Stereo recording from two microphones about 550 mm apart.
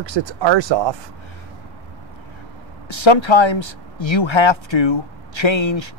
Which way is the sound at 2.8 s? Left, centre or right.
Left.